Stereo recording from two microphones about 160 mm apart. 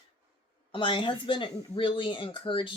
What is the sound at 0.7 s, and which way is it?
Speech, 30° left (ahead or behind).